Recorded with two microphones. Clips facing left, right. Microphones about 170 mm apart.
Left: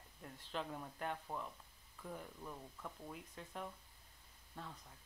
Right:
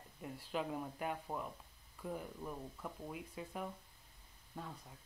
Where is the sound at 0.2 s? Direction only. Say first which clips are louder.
Right 5 dB; 10° right (ahead or behind).